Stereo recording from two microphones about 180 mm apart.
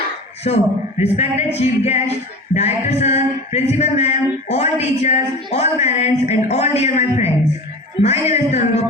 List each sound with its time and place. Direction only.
0.4 s speech: 35° left (ahead or behind)